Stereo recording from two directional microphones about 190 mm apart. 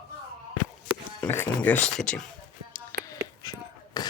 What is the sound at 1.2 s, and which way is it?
Speech, 10° left (ahead or behind).